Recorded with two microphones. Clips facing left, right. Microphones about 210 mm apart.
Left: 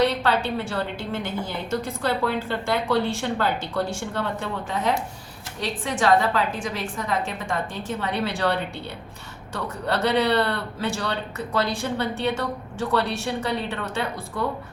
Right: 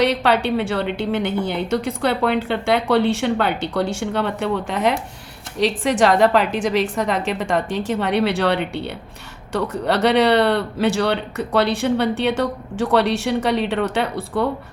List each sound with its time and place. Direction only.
0.0 s a woman's voice: 75° right (ahead or behind)